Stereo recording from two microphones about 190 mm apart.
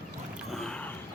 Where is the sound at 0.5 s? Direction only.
Centre (ahead or behind).